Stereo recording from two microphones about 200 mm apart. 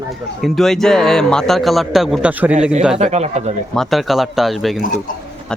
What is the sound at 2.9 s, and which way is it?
Speech, 35° right (ahead or behind).